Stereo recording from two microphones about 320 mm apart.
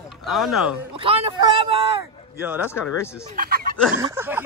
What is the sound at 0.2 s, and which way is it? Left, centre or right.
Speech, centre.